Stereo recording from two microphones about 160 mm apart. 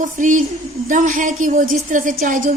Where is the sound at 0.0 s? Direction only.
55° right (ahead or behind).